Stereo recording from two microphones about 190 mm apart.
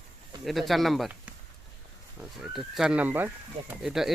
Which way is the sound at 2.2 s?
Centre (ahead or behind).